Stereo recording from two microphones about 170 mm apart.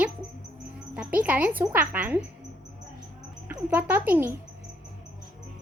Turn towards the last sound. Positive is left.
turn(degrees=-10)  # may be behind; listen again after turning